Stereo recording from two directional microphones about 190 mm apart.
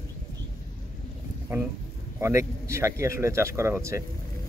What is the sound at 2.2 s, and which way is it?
Speech, 15° right (ahead or behind).